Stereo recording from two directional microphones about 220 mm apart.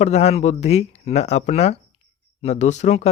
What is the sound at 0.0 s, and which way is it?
A man's voice, 30° left (ahead or behind).